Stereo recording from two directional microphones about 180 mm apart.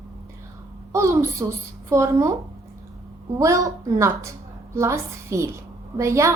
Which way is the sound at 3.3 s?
15° right (ahead or behind).